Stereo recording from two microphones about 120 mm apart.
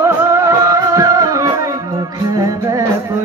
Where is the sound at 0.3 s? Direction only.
25° right (ahead or behind).